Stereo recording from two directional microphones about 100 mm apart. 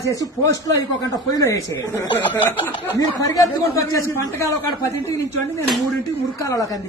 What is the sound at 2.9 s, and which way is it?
A man's voice, 35° left (ahead or behind).